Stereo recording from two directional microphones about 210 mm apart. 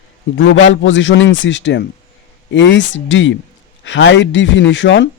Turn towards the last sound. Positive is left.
turn(degrees=55)  # may be behind; listen again after turning